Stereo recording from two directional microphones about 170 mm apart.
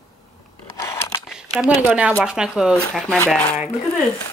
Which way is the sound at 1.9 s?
10° right (ahead or behind).